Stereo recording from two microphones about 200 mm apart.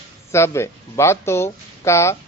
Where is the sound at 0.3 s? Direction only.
15° left (ahead or behind).